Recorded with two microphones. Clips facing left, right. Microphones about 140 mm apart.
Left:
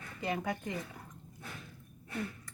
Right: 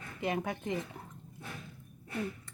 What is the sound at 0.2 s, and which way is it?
Speech, 20° right (ahead or behind).